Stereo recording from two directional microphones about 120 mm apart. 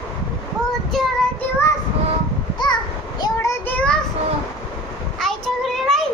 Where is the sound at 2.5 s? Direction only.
40° left (ahead or behind).